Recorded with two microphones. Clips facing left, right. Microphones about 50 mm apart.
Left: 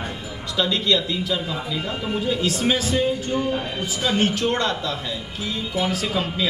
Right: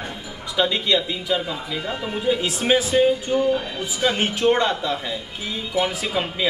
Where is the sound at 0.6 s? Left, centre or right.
Right.